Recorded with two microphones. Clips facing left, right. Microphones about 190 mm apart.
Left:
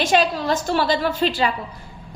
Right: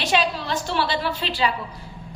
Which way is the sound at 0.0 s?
45° left (ahead or behind).